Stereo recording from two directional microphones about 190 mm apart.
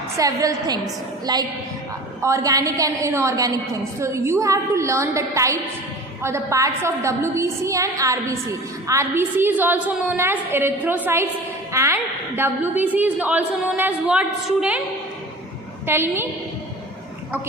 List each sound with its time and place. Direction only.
0.2 s a woman's voice: 20° right (ahead or behind)
15.9 s a woman's voice: 10° right (ahead or behind)